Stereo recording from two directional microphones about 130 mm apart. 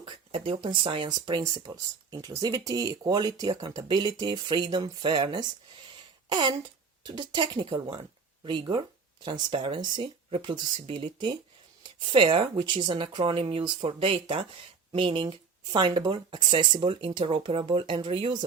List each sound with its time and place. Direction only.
0.0 s speech: 45° right (ahead or behind)